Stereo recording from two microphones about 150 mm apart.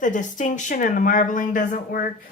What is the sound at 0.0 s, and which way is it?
Speech, 55° left (ahead or behind).